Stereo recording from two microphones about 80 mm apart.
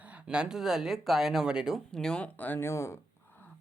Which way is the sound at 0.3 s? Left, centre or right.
Centre.